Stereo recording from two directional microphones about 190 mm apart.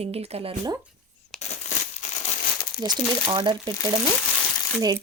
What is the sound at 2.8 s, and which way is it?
Speech, 20° right (ahead or behind).